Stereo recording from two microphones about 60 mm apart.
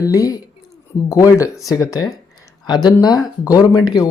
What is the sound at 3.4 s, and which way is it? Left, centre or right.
Speech, left.